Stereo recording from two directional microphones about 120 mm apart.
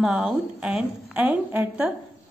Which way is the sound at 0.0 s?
5° right (ahead or behind).